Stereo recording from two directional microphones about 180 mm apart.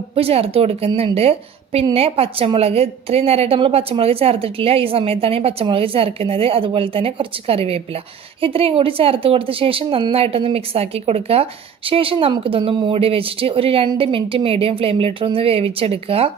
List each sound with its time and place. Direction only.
0.1 s a woman's voice: 35° right (ahead or behind)